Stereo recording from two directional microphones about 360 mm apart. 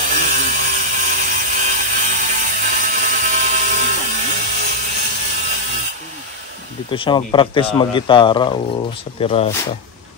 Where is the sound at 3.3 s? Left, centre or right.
Centre.